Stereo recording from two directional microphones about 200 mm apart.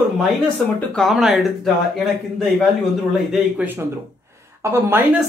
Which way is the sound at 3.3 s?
5° right (ahead or behind).